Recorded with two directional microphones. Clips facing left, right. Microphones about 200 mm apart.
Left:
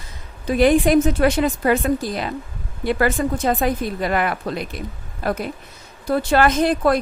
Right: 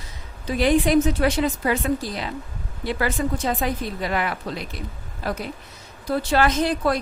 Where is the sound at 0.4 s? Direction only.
50° left (ahead or behind).